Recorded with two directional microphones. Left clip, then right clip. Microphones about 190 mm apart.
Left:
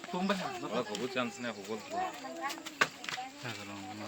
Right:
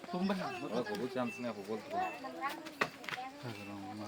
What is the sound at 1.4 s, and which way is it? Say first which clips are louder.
Speech: left 1 dB; 10° right (ahead or behind).